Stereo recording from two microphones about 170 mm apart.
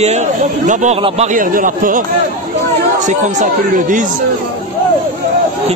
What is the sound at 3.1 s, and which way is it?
Speech, 50° right (ahead or behind).